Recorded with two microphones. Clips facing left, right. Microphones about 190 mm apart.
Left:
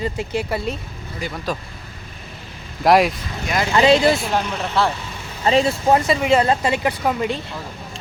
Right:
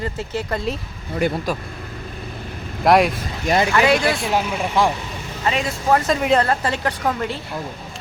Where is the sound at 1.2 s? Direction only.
60° right (ahead or behind).